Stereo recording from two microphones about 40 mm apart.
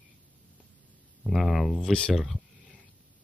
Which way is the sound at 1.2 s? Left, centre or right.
Centre.